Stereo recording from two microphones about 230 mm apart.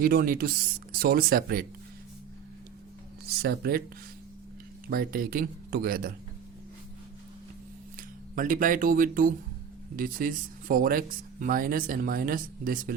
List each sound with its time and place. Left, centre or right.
0.0 s speech: right
3.2 s speech: right
4.9 s speech: right
7.9 s speech: right